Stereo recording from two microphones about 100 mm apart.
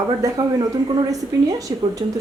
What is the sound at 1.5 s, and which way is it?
Speech, 35° right (ahead or behind).